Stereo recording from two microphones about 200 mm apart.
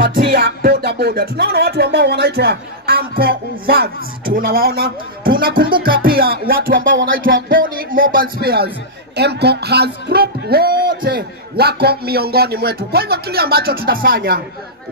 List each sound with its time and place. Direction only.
0.0 s music: 60° right (ahead or behind)